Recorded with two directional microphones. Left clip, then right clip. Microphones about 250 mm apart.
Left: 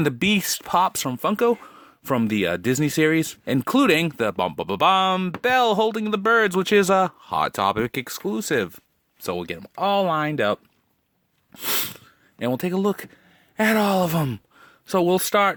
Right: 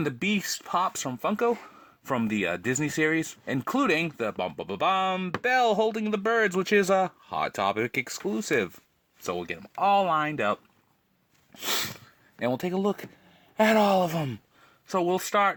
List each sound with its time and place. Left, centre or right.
0.0 s speech: left
3.5 s speech: left
11.5 s speech: left
14.8 s speech: left